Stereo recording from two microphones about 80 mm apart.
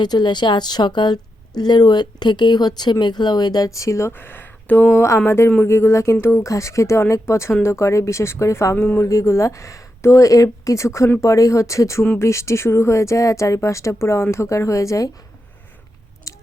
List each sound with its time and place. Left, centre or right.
0.0 s speech: left
16.3 s chewing: left